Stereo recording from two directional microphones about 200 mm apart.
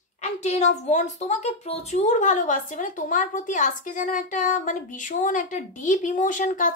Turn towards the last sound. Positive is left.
turn(degrees=40)  # may be behind; listen again after turning